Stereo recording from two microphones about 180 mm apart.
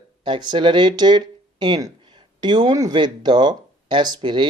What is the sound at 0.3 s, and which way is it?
Speech, 25° right (ahead or behind).